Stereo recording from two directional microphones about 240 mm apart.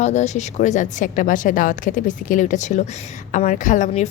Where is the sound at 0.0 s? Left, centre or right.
Left.